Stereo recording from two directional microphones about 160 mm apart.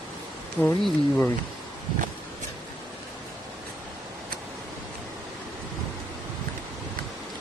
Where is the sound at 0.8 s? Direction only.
Centre (ahead or behind).